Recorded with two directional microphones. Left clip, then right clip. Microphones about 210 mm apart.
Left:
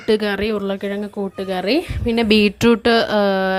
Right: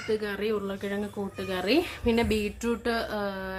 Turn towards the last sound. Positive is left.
turn(degrees=45)  # may be behind; listen again after turning